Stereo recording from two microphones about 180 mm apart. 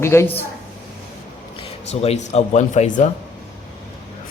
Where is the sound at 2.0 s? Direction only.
35° left (ahead or behind).